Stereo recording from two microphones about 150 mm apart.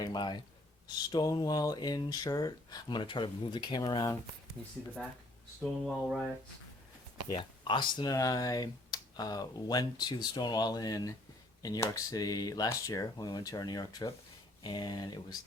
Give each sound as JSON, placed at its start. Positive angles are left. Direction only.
{"t": 0.0, "sound": "speech", "side_deg": 30}
{"t": 5.8, "sound": "a sound", "side_deg": 0}
{"t": 7.3, "sound": "speech", "side_deg": 30}